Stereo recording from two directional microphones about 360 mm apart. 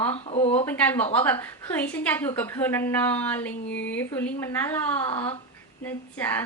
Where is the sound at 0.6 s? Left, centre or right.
Centre.